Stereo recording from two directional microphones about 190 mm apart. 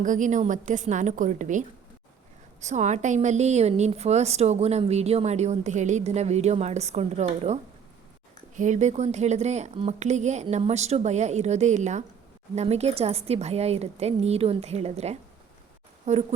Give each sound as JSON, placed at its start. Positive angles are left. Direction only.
{"t": 0.0, "sound": "a woman's voice", "side_deg": -40}